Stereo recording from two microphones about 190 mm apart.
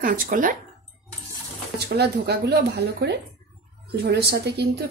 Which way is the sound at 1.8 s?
60° right (ahead or behind).